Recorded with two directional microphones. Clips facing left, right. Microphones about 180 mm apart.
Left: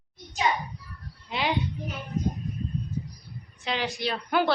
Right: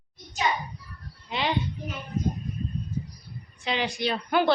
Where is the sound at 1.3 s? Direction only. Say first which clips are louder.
Even; 5° left (ahead or behind).